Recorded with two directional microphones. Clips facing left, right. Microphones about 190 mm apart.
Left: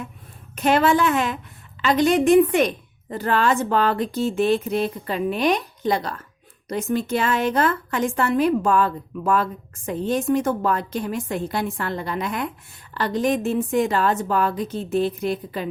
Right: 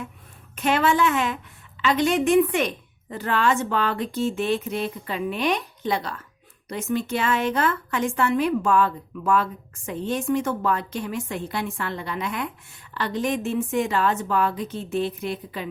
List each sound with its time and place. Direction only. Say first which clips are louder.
0.5 s a woman's voice: left 3 dB; 40° left (ahead or behind)